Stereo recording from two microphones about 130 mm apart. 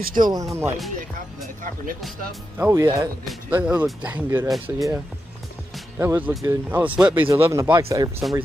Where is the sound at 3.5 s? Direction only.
10° right (ahead or behind).